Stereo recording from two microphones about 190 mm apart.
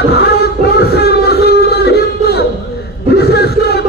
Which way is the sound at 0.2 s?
60° left (ahead or behind).